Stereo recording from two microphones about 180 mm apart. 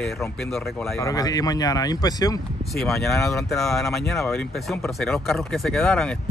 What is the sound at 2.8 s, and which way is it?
Speech, centre (ahead or behind).